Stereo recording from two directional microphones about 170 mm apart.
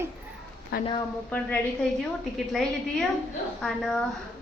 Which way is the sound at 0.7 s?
65° left (ahead or behind).